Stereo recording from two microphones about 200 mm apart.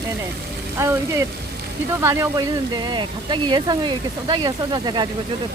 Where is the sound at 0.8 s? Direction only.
15° right (ahead or behind).